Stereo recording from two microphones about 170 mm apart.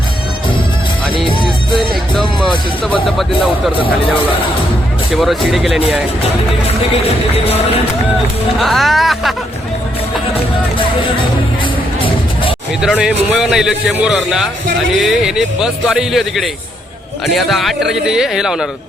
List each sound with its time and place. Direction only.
2.1 s a man's voice: 5° left (ahead or behind)
5.1 s a man's voice: centre (ahead or behind)
6.7 s music: 35° left (ahead or behind)
8.5 s a man's voice: centre (ahead or behind)
11.6 s music: 30° left (ahead or behind)
12.8 s a man's voice: 5° right (ahead or behind)